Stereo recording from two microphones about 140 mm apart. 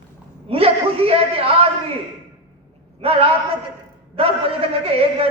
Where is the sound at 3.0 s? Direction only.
45° right (ahead or behind).